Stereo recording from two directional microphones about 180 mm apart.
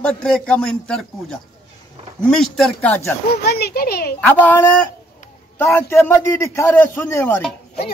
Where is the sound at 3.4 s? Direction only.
60° left (ahead or behind).